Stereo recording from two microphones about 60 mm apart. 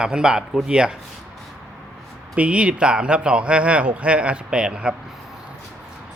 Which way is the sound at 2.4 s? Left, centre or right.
Centre.